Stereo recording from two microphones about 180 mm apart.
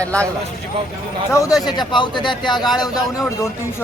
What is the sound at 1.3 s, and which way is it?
Speech, 20° left (ahead or behind).